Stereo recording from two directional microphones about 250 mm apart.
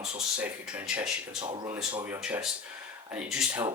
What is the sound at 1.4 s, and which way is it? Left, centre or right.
Speech, right.